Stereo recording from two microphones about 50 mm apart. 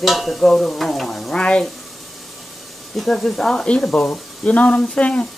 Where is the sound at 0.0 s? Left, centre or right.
Centre.